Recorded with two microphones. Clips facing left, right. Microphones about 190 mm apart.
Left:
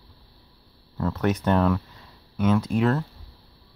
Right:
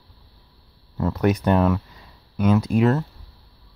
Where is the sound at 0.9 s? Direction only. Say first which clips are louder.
Right 4 dB; 15° right (ahead or behind).